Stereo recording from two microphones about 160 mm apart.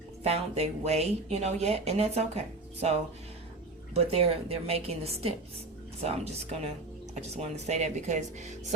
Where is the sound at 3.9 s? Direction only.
40° right (ahead or behind).